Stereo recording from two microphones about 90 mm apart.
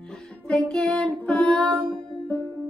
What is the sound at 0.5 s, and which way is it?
Child singing, 10° left (ahead or behind).